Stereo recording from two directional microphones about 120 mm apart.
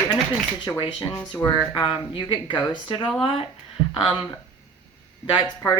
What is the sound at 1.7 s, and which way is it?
Speech, 45° left (ahead or behind).